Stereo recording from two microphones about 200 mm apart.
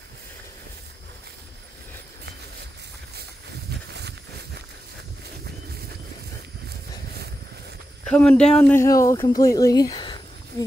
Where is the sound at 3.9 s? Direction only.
55° right (ahead or behind).